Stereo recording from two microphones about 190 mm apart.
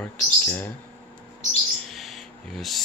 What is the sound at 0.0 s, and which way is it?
Speech, 10° left (ahead or behind).